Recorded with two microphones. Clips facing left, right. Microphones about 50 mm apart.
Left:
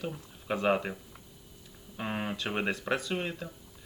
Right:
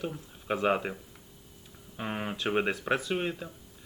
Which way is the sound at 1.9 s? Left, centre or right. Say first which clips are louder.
Even; centre.